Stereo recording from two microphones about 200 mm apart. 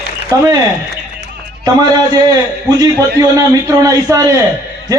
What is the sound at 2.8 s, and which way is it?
A man's voice, 15° right (ahead or behind).